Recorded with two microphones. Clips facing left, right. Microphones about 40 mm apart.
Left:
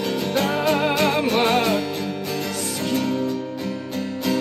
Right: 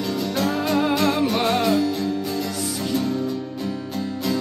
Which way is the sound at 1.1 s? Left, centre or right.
Left.